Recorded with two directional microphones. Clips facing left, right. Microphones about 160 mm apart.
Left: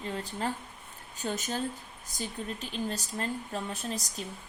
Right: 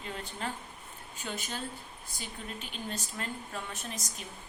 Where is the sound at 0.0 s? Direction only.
35° left (ahead or behind).